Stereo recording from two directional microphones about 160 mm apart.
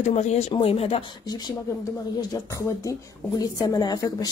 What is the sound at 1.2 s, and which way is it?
A woman's voice, 25° left (ahead or behind).